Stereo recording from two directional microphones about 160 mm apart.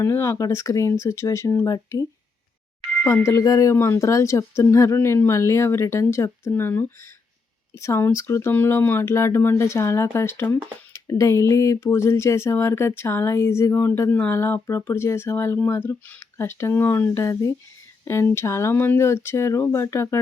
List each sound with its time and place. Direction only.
0.0 s speech: 15° left (ahead or behind)
3.1 s speech: 15° left (ahead or behind)